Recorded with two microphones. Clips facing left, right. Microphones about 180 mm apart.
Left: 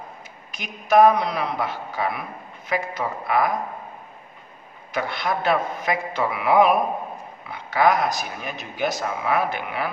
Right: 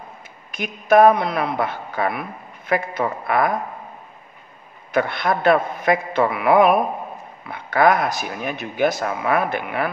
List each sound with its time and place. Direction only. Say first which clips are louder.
0.5 s a man's voice: right 5 dB; 55° right (ahead or behind)
4.9 s a man's voice: right 5 dB; 55° right (ahead or behind)